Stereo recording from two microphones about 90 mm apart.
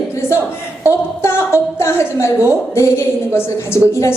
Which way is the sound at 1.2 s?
30° left (ahead or behind).